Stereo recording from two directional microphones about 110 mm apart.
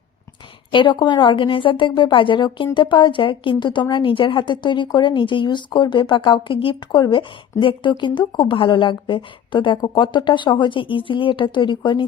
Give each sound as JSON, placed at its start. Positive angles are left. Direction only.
{"t": 0.7, "sound": "a woman's voice", "side_deg": 45}